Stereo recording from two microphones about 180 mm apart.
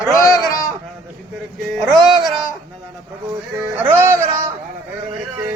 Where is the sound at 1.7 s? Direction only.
Centre (ahead or behind).